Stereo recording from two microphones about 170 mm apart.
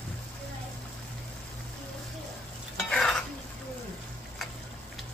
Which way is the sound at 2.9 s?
5° left (ahead or behind).